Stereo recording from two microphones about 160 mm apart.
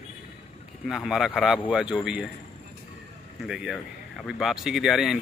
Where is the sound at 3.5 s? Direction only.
Centre (ahead or behind).